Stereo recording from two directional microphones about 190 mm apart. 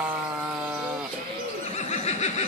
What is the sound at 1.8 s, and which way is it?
Neigh, 35° left (ahead or behind).